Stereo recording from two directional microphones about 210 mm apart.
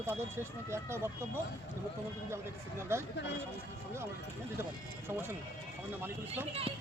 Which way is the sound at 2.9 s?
10° right (ahead or behind).